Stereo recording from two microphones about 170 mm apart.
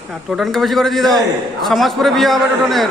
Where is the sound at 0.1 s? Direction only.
Centre (ahead or behind).